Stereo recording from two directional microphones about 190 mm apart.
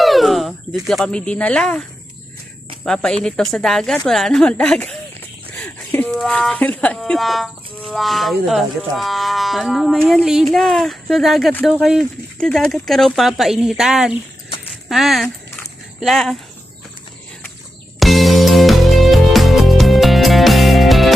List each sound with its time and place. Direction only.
0.0 s a sound: centre (ahead or behind)
0.9 s speech: 5° left (ahead or behind)
2.8 s speech: 5° left (ahead or behind)
5.5 s a sound: 5° left (ahead or behind)
6.1 s speech: centre (ahead or behind)
18.0 s music: centre (ahead or behind)